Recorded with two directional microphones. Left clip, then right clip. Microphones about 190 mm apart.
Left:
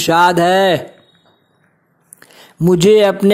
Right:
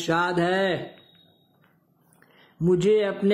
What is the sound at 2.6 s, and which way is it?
Speech, 40° left (ahead or behind).